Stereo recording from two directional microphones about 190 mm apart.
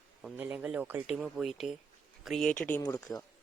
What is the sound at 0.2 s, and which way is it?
Speech, 5° right (ahead or behind).